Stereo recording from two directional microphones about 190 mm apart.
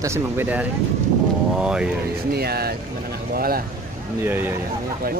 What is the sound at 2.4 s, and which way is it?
Speech, 55° right (ahead or behind).